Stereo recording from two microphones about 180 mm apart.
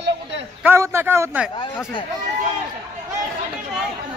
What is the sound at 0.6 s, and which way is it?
Speech, 15° right (ahead or behind).